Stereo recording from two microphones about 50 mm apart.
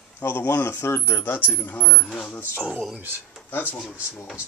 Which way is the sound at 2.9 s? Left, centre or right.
Right.